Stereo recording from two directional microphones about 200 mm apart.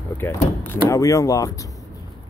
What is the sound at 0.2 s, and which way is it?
Speech, 10° left (ahead or behind).